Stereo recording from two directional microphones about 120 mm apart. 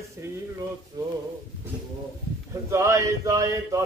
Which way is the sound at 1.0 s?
30° right (ahead or behind).